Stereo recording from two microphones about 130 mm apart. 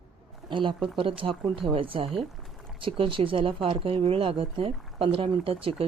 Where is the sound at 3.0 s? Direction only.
40° right (ahead or behind).